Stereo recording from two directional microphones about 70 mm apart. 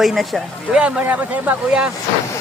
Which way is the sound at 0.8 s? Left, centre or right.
Right.